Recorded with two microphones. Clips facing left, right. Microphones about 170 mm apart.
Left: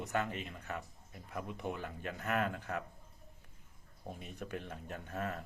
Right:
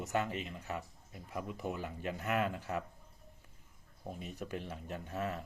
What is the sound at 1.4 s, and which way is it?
Speech, centre (ahead or behind).